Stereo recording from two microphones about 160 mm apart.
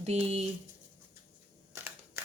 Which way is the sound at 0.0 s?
40° right (ahead or behind).